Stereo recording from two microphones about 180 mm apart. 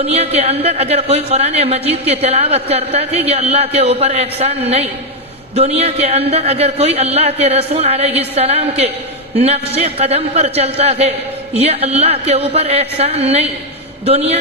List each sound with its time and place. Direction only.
0.0 s a woman's voice: 35° right (ahead or behind)